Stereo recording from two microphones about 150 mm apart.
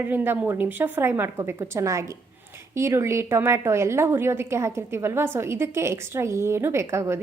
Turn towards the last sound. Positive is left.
turn(degrees=-20)  # may be behind; listen again after turning